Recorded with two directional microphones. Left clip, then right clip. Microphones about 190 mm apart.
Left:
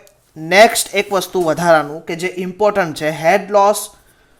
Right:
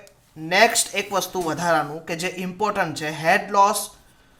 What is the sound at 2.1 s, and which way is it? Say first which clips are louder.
Speech: left 6 dB; 25° left (ahead or behind).